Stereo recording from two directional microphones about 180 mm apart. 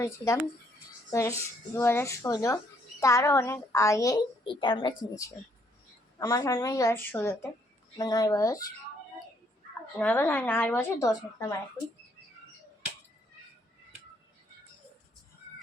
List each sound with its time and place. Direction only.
1.1 s a woman's voice: 15° left (ahead or behind)
10.0 s a woman's voice: 10° left (ahead or behind)